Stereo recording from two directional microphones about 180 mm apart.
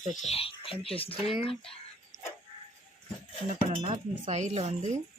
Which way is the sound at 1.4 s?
30° left (ahead or behind).